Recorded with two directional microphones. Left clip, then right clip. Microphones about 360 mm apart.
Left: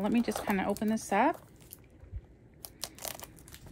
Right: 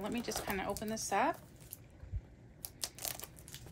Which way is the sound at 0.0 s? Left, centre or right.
Centre.